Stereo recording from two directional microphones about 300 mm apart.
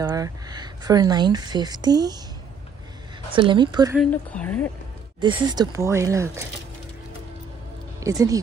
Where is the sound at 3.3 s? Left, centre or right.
Centre.